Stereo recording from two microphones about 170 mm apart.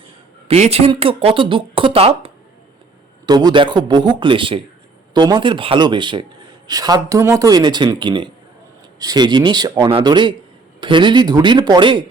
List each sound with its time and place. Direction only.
0.4 s speech: 40° right (ahead or behind)
3.2 s speech: 25° right (ahead or behind)